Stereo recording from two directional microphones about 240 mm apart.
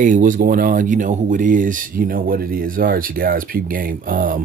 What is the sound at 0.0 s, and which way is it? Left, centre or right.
Speech, right.